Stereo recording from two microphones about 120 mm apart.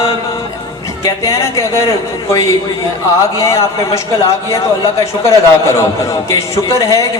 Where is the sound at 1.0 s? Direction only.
25° left (ahead or behind).